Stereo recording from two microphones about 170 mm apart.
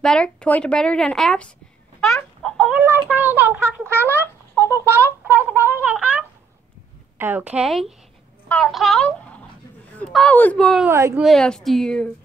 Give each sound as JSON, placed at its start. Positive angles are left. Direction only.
{"t": 0.0, "sound": "a woman's voice", "side_deg": 5}
{"t": 2.4, "sound": "chicken", "side_deg": 5}
{"t": 2.7, "sound": "a child's voice", "side_deg": -10}
{"t": 4.2, "sound": "a sound", "side_deg": -15}
{"t": 7.2, "sound": "a woman's voice", "side_deg": -10}
{"t": 10.9, "sound": "a woman's voice", "side_deg": -15}
{"t": 11.1, "sound": "a woman's voice", "side_deg": 0}